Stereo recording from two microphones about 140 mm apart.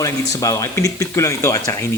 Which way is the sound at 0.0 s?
25° left (ahead or behind).